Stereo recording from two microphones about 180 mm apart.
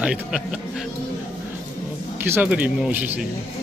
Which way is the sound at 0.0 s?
5° right (ahead or behind).